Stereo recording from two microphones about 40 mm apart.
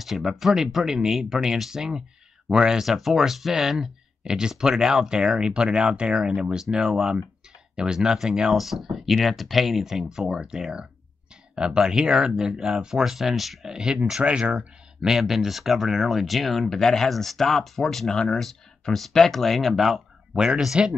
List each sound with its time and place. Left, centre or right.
0.0 s speech: centre
7.7 s speech: centre
13.7 s speech: centre
14.2 s speech: right
15.0 s speech: centre
18.1 s speech: centre
18.4 s speech: centre
20.3 s speech: centre